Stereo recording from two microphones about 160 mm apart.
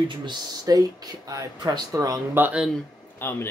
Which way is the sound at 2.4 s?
5° right (ahead or behind).